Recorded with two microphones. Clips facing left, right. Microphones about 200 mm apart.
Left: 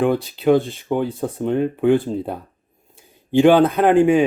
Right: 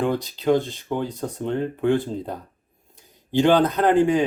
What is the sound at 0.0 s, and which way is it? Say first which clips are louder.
Speech: left 5 dB; 10° left (ahead or behind).